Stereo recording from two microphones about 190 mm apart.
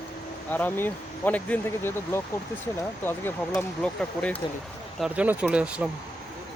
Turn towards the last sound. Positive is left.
turn(degrees=-5)  # may be behind; listen again after turning